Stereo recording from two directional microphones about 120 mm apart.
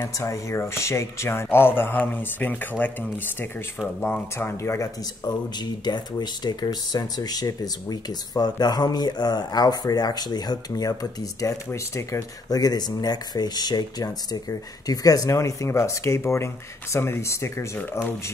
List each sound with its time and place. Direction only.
0.0 s speech: 25° left (ahead or behind)
5.9 s speech: 35° left (ahead or behind); by 17.8 s 20° left (ahead or behind)